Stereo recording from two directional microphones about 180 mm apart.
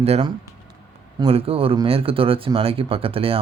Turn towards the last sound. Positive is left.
turn(degrees=-30)  # may be behind; listen again after turning